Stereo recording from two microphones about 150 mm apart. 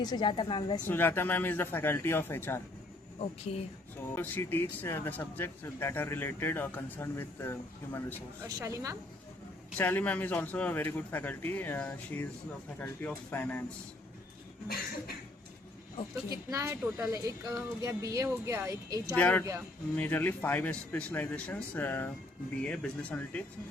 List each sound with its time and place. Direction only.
0.0 s a woman's voice: 30° left (ahead or behind)
0.9 s speech: 15° left (ahead or behind)
3.2 s a woman's voice: 40° left (ahead or behind)
4.1 s speech: 15° left (ahead or behind)
8.4 s speech: 20° right (ahead or behind)
9.7 s speech: 10° left (ahead or behind)
16.3 s speech: 20° right (ahead or behind)
19.1 s speech: 10° left (ahead or behind)